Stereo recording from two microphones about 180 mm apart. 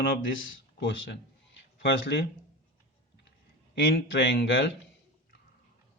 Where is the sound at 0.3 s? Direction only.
90° left; by 2.2 s 70° left (ahead or behind).